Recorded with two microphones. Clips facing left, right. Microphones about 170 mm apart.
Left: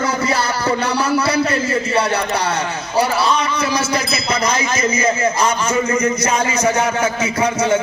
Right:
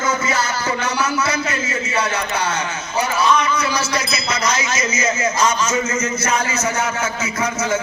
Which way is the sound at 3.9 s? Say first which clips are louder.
Left 3 dB; 30° left (ahead or behind).